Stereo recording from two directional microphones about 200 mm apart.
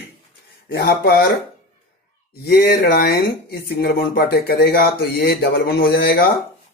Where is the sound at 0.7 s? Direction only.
50° left (ahead or behind).